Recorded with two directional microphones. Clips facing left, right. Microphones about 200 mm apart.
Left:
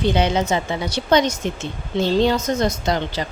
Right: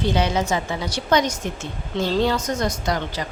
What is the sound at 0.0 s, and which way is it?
Speech, 20° left (ahead or behind).